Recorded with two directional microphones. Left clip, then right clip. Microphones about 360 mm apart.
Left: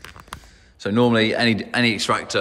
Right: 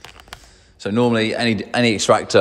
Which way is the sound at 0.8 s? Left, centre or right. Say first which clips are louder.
Even; centre.